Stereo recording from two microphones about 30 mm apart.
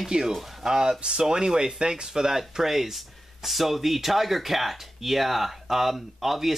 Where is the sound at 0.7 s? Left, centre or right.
Right.